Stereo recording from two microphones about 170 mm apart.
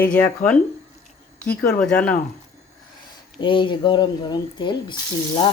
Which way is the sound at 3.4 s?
30° left (ahead or behind).